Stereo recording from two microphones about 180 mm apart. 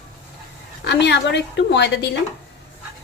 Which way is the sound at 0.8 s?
70° left (ahead or behind).